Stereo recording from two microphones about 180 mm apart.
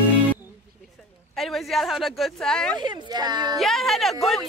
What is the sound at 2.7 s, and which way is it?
Speech, 25° right (ahead or behind).